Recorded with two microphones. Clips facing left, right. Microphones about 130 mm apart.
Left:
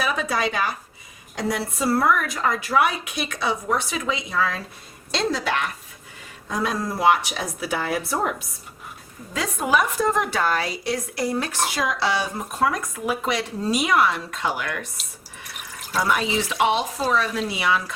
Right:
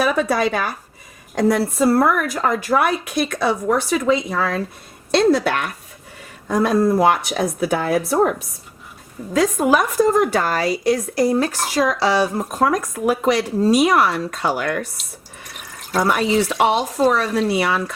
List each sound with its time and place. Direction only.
0.0 s a woman's voice: 50° right (ahead or behind)
16.0 s a woman's voice: 50° right (ahead or behind)